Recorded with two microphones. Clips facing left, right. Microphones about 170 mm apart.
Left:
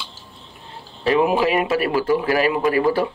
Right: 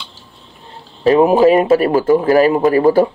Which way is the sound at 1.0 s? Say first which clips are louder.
Right 8 dB; 40° right (ahead or behind).